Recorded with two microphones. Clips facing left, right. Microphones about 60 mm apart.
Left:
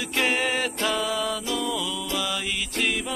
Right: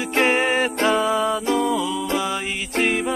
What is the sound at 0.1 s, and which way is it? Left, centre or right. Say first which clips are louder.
Music: right 6 dB; right.